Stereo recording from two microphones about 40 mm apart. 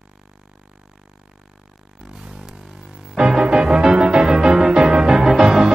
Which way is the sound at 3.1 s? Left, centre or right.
Right.